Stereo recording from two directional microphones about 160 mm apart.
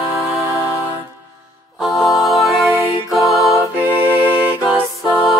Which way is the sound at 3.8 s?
10° right (ahead or behind).